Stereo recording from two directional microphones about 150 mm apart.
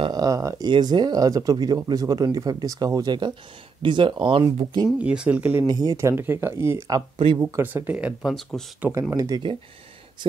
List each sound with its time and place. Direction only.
0.0 s speech: 25° right (ahead or behind)
4.8 s speech: 5° right (ahead or behind)
5.7 s speech: 25° right (ahead or behind); by 8.6 s centre (ahead or behind)
9.1 s speech: 25° right (ahead or behind)